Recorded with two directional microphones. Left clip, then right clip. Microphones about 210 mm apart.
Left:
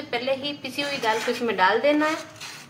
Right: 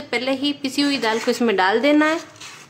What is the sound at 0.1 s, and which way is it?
A woman's voice, 50° right (ahead or behind).